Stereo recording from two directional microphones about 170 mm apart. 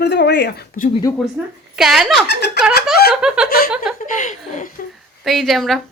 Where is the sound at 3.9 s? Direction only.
50° left (ahead or behind).